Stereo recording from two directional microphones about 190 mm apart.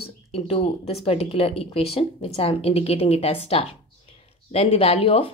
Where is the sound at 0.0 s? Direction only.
30° left (ahead or behind).